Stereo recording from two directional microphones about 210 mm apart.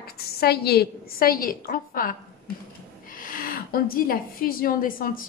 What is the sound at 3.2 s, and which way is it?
A woman's voice, 40° left (ahead or behind).